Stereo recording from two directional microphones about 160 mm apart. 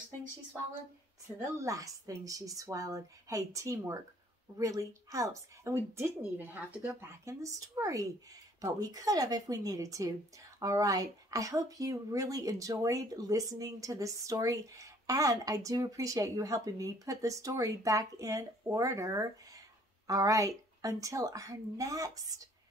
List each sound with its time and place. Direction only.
1.2 s speech: 20° right (ahead or behind)